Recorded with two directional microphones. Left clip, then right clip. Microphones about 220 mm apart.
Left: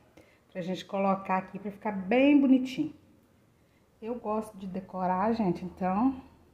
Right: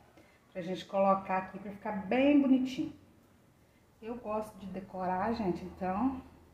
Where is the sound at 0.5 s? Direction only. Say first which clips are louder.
Right 1 dB; 50° left (ahead or behind).